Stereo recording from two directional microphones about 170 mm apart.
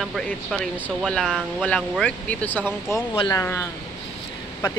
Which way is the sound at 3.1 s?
30° left (ahead or behind).